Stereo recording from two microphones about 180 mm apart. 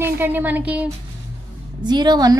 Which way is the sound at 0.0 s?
10° right (ahead or behind).